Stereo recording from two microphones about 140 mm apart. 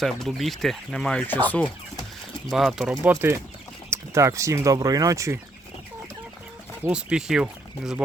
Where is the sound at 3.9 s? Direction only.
20° right (ahead or behind).